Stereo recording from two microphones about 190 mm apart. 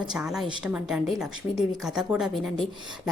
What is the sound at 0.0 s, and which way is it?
A woman's voice, 5° right (ahead or behind).